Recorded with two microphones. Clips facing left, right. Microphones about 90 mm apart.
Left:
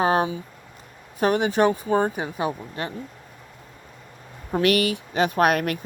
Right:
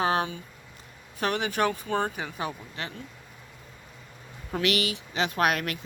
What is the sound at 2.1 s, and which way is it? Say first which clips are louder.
Speech: left 6 dB; 40° left (ahead or behind).